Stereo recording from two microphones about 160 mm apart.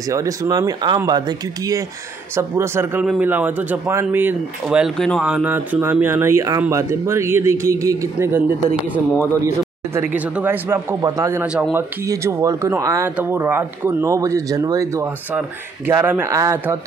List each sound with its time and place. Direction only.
0.1 s speech: 20° right (ahead or behind)
2.3 s speech: 15° right (ahead or behind)
9.9 s speech: 10° right (ahead or behind)
11.4 s speech: 5° right (ahead or behind)
12.1 s speech: 20° right (ahead or behind)